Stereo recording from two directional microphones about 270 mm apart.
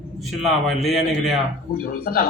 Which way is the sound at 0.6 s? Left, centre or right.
Centre.